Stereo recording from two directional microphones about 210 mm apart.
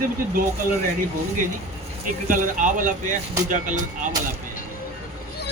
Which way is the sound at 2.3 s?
40° right (ahead or behind).